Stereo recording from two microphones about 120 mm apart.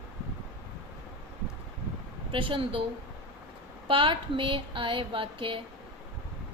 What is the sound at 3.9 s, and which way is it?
Speech, 45° right (ahead or behind).